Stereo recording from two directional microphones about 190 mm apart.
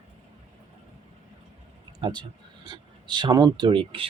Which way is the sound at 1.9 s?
25° right (ahead or behind).